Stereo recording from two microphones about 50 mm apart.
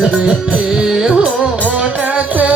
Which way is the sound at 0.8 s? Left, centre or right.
Centre.